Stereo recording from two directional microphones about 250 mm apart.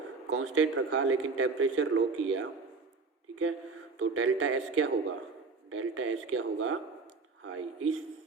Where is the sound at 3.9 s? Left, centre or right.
Right.